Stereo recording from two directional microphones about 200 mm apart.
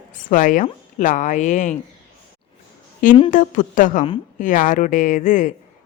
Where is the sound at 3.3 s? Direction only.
40° left (ahead or behind).